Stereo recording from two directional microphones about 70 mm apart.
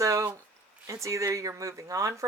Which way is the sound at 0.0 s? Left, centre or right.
Right.